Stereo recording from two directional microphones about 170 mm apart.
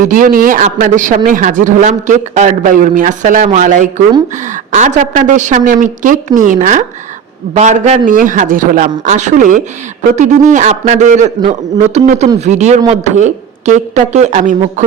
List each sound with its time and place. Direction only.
0.0 s a man's voice: 55° right (ahead or behind)